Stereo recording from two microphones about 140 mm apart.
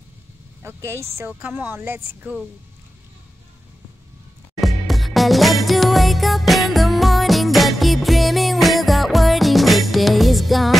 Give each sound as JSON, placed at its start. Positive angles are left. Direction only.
{"t": 0.6, "sound": "vehicle", "side_deg": -15}
{"t": 1.1, "sound": "speech", "side_deg": -15}
{"t": 4.6, "sound": "music", "side_deg": 0}